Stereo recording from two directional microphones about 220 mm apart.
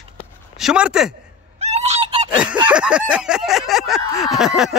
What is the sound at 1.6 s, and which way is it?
Goose, 30° right (ahead or behind).